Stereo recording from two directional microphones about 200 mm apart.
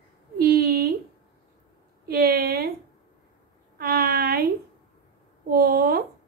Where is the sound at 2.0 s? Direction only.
50° right (ahead or behind).